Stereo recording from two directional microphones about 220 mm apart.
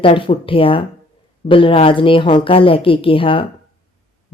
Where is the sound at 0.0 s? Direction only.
25° left (ahead or behind).